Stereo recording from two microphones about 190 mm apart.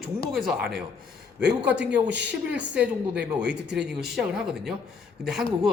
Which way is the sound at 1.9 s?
65° right (ahead or behind).